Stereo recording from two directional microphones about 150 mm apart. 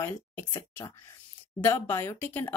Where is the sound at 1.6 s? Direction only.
15° left (ahead or behind).